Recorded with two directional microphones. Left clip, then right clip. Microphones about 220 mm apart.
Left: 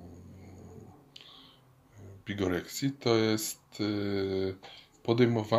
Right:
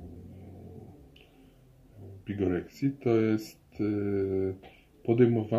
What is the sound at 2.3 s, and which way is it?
Speech, 5° left (ahead or behind).